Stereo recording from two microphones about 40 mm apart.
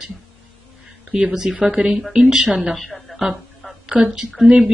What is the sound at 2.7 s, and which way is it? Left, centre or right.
Speech, centre.